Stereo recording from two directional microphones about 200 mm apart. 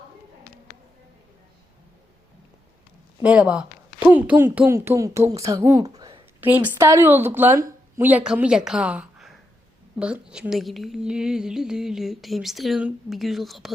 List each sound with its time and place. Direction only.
3.2 s a woman's voice: 5° right (ahead or behind); by 6.2 s 20° right (ahead or behind)
6.4 s speech: 10° right (ahead or behind)